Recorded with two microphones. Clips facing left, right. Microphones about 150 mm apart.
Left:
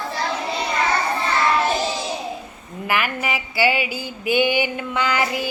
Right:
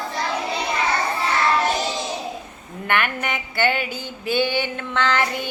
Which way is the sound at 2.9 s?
5° left (ahead or behind).